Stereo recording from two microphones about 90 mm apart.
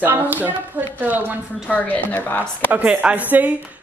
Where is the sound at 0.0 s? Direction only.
20° right (ahead or behind).